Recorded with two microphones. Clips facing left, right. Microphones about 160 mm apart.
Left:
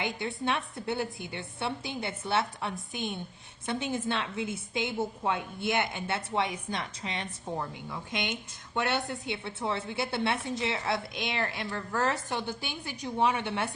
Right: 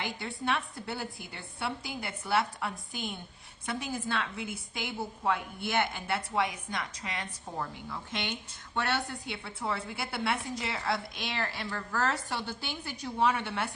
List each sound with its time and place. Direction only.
0.0 s a woman's voice: 20° left (ahead or behind)
7.9 s a woman's voice: 15° left (ahead or behind)